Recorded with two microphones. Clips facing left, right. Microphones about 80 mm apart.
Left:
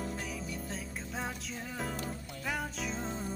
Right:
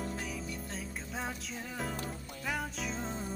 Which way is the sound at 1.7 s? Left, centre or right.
Centre.